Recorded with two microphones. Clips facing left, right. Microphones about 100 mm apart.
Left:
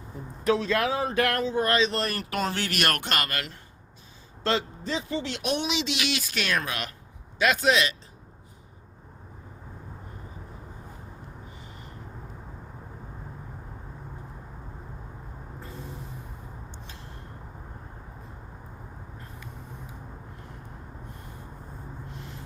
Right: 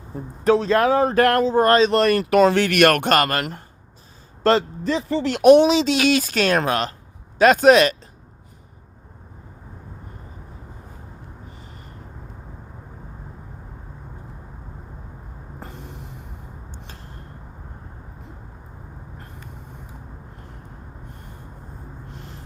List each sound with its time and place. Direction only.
0.4 s speech: 35° right (ahead or behind)
1.9 s speech: 70° right (ahead or behind); by 7.9 s 50° right (ahead or behind)
15.6 s vehicle: 65° right (ahead or behind)
16.7 s a sound: 45° right (ahead or behind)